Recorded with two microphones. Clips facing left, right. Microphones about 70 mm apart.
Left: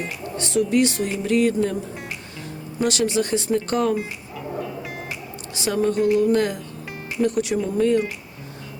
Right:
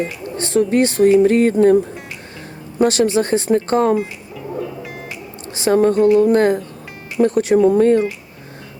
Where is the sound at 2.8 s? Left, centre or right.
Right.